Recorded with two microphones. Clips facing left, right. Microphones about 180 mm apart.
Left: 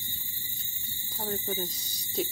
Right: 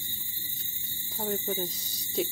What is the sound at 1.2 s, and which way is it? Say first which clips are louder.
Speech: right 2 dB; centre (ahead or behind).